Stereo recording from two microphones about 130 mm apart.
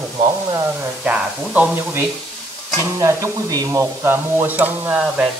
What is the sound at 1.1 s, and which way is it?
Speech, 10° right (ahead or behind).